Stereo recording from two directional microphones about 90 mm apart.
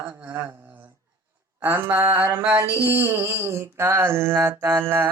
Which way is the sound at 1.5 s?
20° right (ahead or behind).